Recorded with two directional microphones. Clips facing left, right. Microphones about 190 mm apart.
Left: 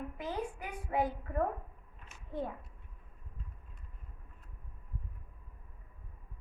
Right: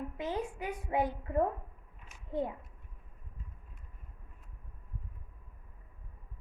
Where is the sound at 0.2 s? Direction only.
20° right (ahead or behind).